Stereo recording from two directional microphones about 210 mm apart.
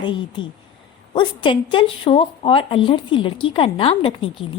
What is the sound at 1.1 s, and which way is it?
A woman's voice, 25° left (ahead or behind).